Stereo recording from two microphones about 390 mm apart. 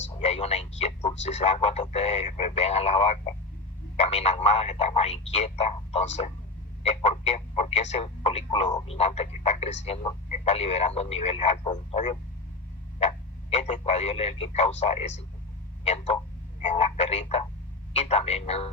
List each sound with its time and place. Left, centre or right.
0.2 s speech: centre
15.8 s a sound: centre
16.6 s speech: centre